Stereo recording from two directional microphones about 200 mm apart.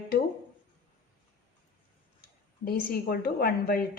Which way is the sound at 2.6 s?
50° left (ahead or behind).